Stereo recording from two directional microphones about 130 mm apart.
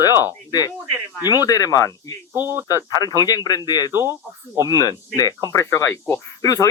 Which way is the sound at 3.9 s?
20° right (ahead or behind).